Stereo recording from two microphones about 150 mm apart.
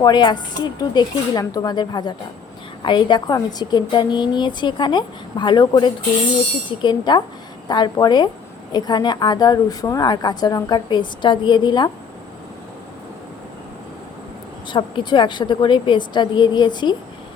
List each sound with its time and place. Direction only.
0.0 s a woman's voice: 30° left (ahead or behind)
14.7 s a woman's voice: 30° left (ahead or behind)